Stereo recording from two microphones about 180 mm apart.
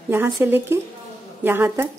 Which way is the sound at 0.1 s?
10° right (ahead or behind).